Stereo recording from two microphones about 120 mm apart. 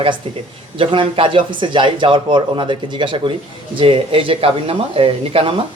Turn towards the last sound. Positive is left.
turn(degrees=-50)  # may be behind; listen again after turning